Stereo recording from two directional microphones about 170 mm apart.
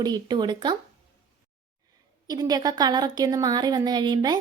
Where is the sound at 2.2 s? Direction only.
25° right (ahead or behind).